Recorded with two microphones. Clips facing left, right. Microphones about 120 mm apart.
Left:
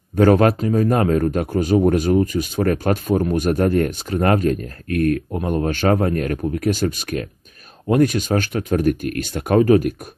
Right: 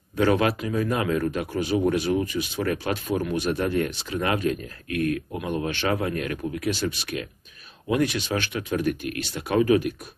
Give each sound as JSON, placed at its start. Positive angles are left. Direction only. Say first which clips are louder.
{"t": 0.1, "sound": "speech", "louder": "left 7 dB", "side_deg": 45}